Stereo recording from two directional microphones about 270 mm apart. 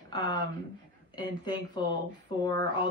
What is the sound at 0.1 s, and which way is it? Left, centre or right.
Speech, centre.